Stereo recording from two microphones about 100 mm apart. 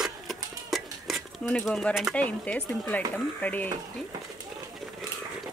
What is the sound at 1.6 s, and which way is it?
Speech, 5° left (ahead or behind).